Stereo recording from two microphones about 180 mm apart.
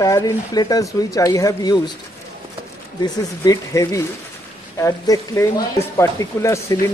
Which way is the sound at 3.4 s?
20° left (ahead or behind).